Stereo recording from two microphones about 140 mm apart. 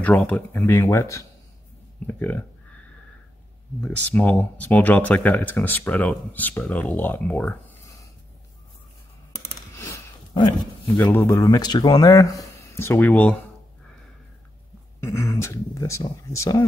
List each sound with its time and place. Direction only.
0.0 s speech: 10° left (ahead or behind)
3.8 s speech: 10° left (ahead or behind)
7.8 s a sound: 25° left (ahead or behind)
9.8 s a sound: 20° left (ahead or behind)
11.0 s speech: 15° left (ahead or behind)
11.4 s speech: 30° left (ahead or behind); by 13.4 s 10° left (ahead or behind)
15.0 s speech: 20° left (ahead or behind)